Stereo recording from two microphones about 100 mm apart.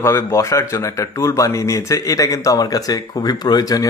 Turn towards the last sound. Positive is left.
turn(degrees=40)  # may be behind; listen again after turning